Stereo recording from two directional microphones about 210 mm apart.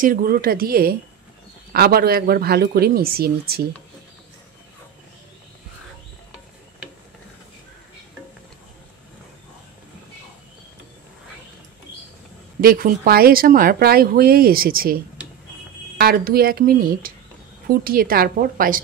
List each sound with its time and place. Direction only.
0.0 s a woman's voice: 45° right (ahead or behind)
12.5 s a woman's voice: 45° right (ahead or behind)
16.0 s a woman's voice: 45° right (ahead or behind)